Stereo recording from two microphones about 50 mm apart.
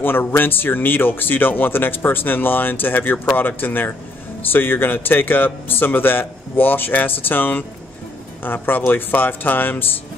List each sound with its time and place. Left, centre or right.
0.0 s speech: left